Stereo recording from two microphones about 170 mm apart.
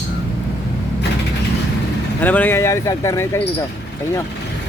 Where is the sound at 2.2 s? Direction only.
10° left (ahead or behind).